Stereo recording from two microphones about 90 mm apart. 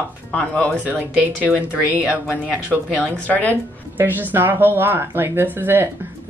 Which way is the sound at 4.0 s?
20° right (ahead or behind).